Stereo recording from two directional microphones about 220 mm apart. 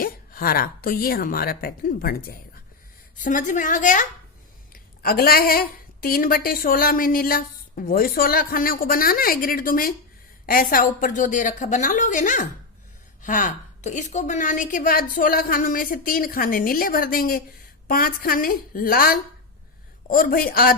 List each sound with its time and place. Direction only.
0.0 s speech: 40° left (ahead or behind)